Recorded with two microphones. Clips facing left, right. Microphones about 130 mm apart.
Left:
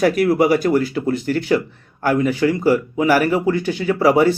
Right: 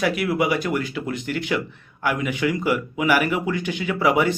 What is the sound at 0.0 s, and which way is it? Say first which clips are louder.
Speech: left 7 dB; 40° left (ahead or behind).